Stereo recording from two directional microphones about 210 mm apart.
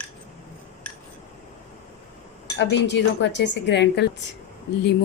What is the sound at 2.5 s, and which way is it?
Speech, 55° left (ahead or behind).